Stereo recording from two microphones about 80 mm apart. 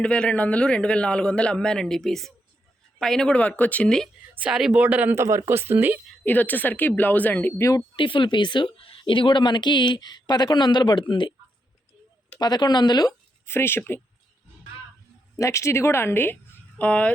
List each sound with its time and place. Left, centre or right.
0.0 s a man's voice: centre
3.8 s speech: centre
4.4 s speech: centre
4.8 s speech: centre
5.1 s a man's voice: right
6.2 s a woman's voice: left
7.9 s a woman's voice: left
12.4 s speech: left
13.4 s speech: left
15.4 s speech: left; by 17.1 s centre